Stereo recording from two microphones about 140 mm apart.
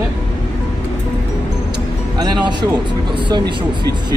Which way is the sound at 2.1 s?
30° right (ahead or behind).